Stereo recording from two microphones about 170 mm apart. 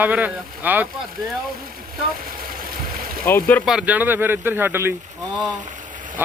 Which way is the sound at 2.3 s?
60° right (ahead or behind).